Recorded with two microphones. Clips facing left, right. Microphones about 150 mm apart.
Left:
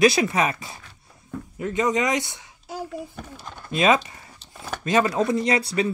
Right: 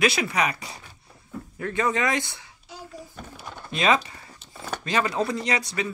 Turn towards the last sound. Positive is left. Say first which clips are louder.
# left 5 dB
turn(degrees=30)  # may be behind; listen again after turning